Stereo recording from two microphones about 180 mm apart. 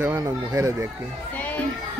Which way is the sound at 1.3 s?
10° left (ahead or behind).